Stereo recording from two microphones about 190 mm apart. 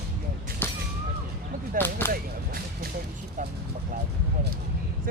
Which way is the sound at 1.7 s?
10° left (ahead or behind).